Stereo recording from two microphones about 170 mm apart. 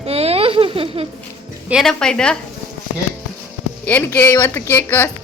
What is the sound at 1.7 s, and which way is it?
Speech, centre (ahead or behind).